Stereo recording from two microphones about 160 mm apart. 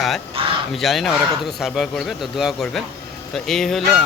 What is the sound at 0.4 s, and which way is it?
Speech, 35° right (ahead or behind).